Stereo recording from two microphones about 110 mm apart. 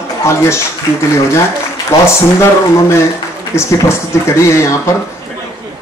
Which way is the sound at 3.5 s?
25° left (ahead or behind).